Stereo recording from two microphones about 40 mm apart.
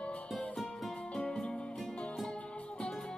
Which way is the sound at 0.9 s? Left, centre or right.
Centre.